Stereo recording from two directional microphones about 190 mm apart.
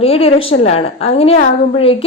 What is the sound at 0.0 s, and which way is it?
A woman's voice, 30° left (ahead or behind).